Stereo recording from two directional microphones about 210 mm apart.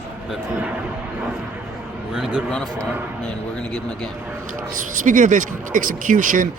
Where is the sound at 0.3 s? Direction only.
5° right (ahead or behind).